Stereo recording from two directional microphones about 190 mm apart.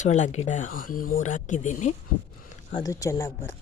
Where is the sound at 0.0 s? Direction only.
40° left (ahead or behind).